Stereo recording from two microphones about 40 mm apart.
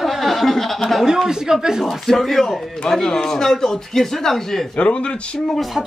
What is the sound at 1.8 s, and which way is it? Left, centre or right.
Speech, centre.